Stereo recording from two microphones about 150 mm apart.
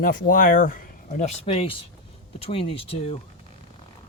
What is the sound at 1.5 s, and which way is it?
Speech, 40° left (ahead or behind).